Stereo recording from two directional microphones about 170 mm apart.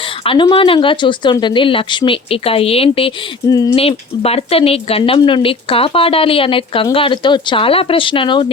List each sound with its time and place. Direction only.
0.3 s speech: 30° left (ahead or behind)
3.5 s speech: 20° left (ahead or behind)
3.8 s speech: 35° left (ahead or behind)